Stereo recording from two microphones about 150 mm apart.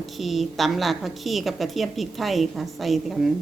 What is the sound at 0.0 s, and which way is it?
A woman's voice, centre (ahead or behind).